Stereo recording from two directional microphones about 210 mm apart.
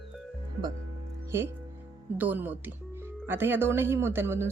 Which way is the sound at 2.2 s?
10° right (ahead or behind).